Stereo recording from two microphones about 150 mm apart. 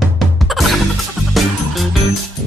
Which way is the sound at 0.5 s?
Centre (ahead or behind).